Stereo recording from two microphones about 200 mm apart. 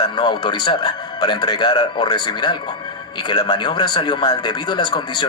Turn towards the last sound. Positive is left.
turn(degrees=20)  # may be behind; listen again after turning